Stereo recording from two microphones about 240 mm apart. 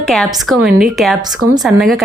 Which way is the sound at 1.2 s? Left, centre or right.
Centre.